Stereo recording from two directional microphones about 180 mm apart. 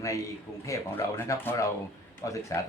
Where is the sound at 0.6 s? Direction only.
15° left (ahead or behind).